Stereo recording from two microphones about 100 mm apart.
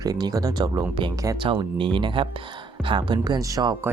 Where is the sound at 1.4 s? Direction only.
60° right (ahead or behind).